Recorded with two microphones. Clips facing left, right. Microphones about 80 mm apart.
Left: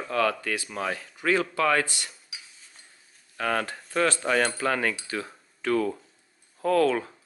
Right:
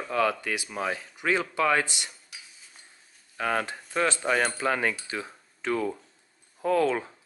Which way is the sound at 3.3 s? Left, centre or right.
Centre.